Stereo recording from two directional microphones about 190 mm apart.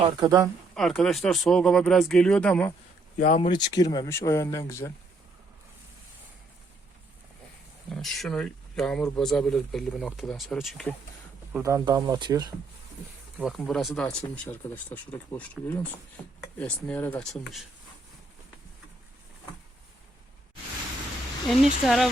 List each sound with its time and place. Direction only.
0.2 s speech: 20° right (ahead or behind)
0.7 s speech: 5° left (ahead or behind)
3.2 s speech: 40° left (ahead or behind)
3.5 s speech: 20° left (ahead or behind)
7.9 s speech: 5° left (ahead or behind)
11.6 s speech: 15° right (ahead or behind)
13.6 s speech: centre (ahead or behind)
21.4 s speech: centre (ahead or behind)